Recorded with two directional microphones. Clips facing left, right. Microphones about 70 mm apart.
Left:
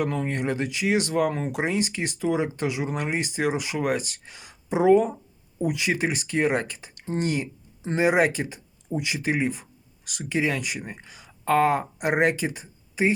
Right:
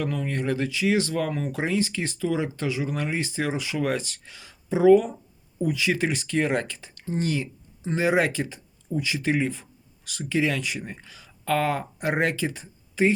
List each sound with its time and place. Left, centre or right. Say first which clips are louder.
0.1 s speech: left 1 dB; left
7.2 s speech: left 1 dB; left
8.0 s speech: left 2 dB; centre
9.2 s speech: even; centre